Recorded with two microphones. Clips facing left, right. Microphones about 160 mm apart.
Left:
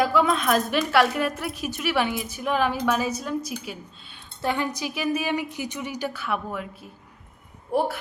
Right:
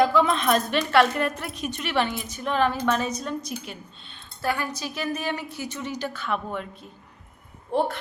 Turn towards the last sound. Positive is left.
turn(degrees=10)  # may be behind; listen again after turning